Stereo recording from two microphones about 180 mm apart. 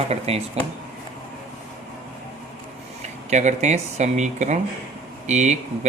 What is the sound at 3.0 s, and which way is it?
Speech, 40° right (ahead or behind).